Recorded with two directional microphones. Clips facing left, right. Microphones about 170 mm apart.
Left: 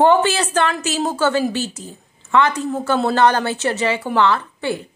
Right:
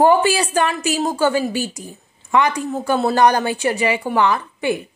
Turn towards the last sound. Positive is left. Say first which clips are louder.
# right 1 dB
turn(degrees=-15)  # may be behind; listen again after turning